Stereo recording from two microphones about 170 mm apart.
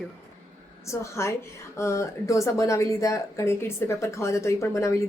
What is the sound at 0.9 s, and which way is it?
Speech, 15° left (ahead or behind).